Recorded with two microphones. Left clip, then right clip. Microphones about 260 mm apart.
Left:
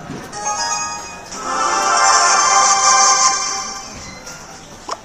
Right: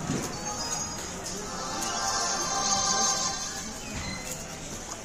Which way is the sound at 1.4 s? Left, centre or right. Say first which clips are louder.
Left 19 dB; left.